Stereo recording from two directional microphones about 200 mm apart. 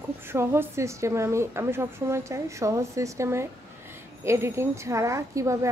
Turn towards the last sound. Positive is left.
turn(degrees=-15)  # may be behind; listen again after turning